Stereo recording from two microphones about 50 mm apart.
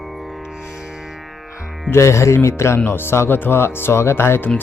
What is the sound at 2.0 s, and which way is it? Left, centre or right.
Speech, left.